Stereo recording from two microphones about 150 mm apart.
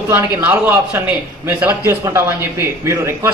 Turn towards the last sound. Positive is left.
turn(degrees=-15)  # may be behind; listen again after turning